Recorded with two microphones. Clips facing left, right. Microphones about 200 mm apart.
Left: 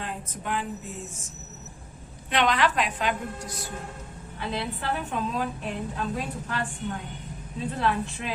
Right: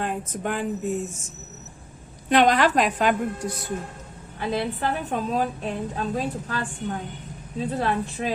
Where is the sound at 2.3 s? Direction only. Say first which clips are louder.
Right 6 dB; 45° right (ahead or behind).